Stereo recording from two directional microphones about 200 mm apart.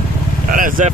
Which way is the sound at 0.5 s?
40° right (ahead or behind).